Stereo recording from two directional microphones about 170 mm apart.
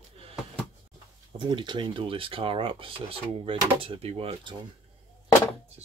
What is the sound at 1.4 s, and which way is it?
Speech, 25° right (ahead or behind).